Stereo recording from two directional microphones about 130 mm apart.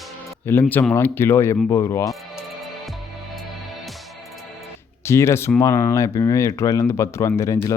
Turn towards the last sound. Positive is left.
turn(degrees=25)  # may be behind; listen again after turning